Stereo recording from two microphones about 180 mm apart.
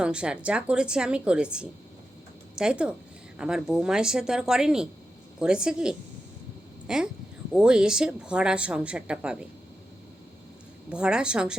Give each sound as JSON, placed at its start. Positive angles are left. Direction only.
{"t": 0.0, "sound": "a woman's voice", "side_deg": -5}
{"t": 10.8, "sound": "a woman's voice", "side_deg": -5}